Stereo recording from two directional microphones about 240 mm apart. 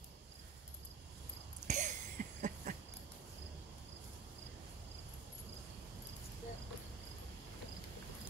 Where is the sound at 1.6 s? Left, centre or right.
Right.